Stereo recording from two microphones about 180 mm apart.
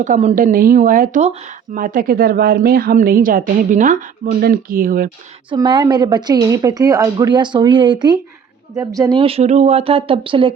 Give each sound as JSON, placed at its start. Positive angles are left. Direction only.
{"t": 0.0, "sound": "speech", "side_deg": -40}
{"t": 5.5, "sound": "a woman's voice", "side_deg": -25}